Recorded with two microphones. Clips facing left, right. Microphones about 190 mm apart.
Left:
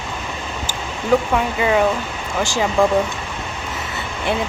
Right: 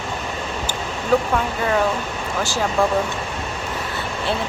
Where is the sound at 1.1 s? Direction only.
15° left (ahead or behind).